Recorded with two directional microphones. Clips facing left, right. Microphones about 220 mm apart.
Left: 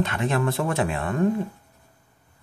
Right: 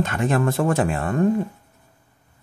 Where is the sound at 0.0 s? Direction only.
45° right (ahead or behind).